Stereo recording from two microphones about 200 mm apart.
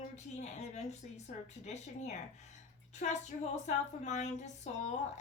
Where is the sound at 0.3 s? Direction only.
35° left (ahead or behind).